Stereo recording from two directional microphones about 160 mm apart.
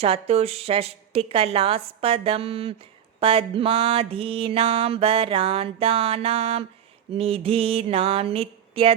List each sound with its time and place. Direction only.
0.0 s mantra: 40° right (ahead or behind)